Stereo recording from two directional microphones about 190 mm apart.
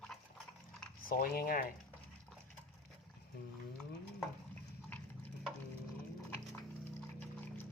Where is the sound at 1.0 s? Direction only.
50° left (ahead or behind).